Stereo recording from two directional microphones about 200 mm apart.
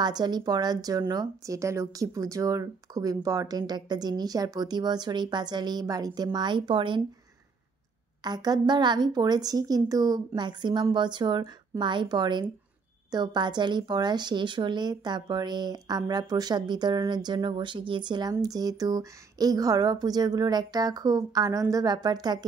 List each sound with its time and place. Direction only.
0.0 s a woman's voice: 20° right (ahead or behind)
8.2 s a woman's voice: 20° right (ahead or behind)